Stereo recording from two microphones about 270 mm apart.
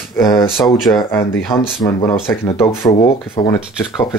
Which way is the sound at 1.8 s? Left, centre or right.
Centre.